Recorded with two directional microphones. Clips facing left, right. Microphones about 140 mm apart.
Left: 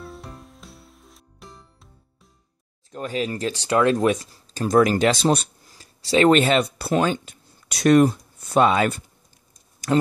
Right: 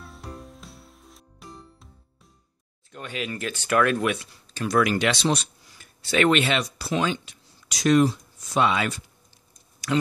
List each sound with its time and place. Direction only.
0.0 s music: centre (ahead or behind)
2.9 s speech: 35° left (ahead or behind)
5.8 s speech: 35° left (ahead or behind)